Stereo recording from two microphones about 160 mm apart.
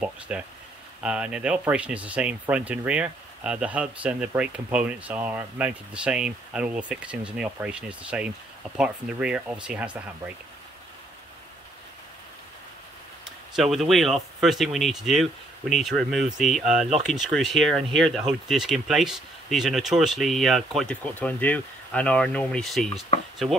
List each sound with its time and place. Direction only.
0.3 s speech: 10° right (ahead or behind)
13.6 s speech: centre (ahead or behind)